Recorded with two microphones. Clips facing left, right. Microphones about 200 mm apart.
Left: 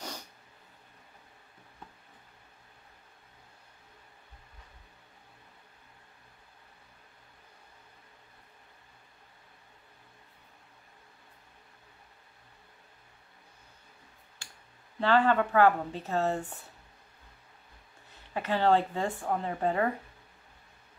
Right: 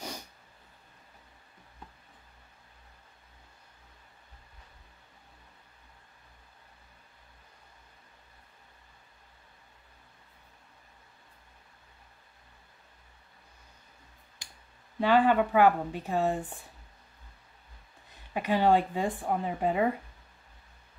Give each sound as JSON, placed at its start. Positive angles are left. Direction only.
{"t": 14.4, "sound": "clicking", "side_deg": -15}
{"t": 15.0, "sound": "a woman's voice", "side_deg": -15}
{"t": 18.3, "sound": "a woman's voice", "side_deg": -15}